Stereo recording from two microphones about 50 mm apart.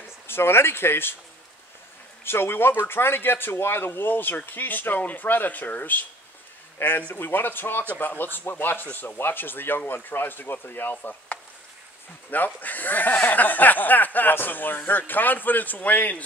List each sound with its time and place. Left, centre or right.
0.3 s speech: left
2.2 s speech: left
6.8 s speech: left